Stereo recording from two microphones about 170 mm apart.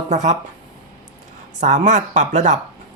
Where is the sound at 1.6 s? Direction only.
45° right (ahead or behind).